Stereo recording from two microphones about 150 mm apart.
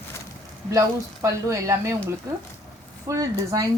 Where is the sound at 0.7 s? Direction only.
20° right (ahead or behind).